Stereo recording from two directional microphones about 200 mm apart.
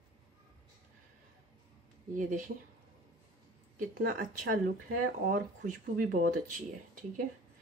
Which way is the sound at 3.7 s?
45° right (ahead or behind).